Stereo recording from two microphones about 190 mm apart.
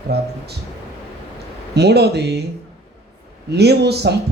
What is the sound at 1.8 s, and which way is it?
Speech, 60° right (ahead or behind).